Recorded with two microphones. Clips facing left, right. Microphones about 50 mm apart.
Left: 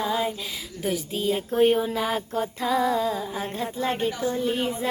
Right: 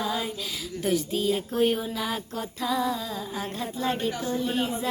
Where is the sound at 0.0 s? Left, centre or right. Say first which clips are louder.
Left 4 dB; centre.